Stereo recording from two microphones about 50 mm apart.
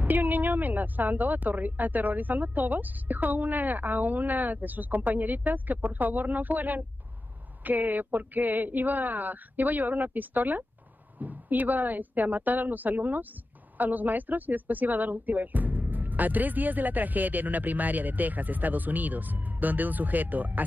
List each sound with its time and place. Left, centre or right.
0.0 s speech: right